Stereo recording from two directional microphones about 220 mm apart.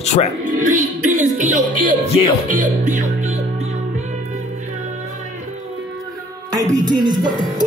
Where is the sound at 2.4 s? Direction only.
35° right (ahead or behind).